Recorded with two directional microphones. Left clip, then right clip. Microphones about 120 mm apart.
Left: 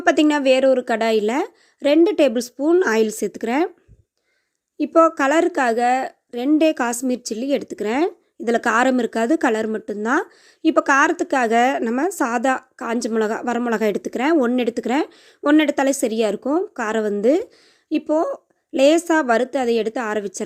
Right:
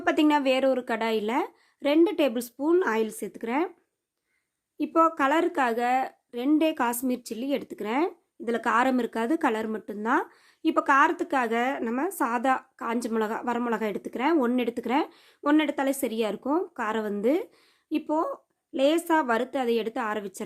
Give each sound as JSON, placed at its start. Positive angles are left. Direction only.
{"t": 0.0, "sound": "a woman's voice", "side_deg": 30}
{"t": 2.8, "sound": "speech", "side_deg": 40}
{"t": 4.8, "sound": "a woman's voice", "side_deg": 25}
{"t": 15.5, "sound": "a woman's voice", "side_deg": 40}
{"t": 18.7, "sound": "a woman's voice", "side_deg": 40}